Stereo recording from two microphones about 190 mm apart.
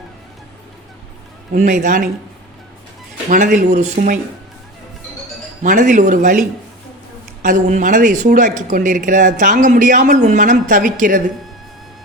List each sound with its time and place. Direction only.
1.5 s speech: 40° right (ahead or behind)
3.2 s speech: 45° right (ahead or behind)
5.6 s speech: 45° right (ahead or behind)
7.4 s speech: 45° right (ahead or behind)